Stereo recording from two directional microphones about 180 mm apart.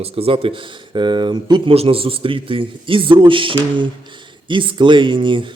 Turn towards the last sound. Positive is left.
turn(degrees=-25)  # may be behind; listen again after turning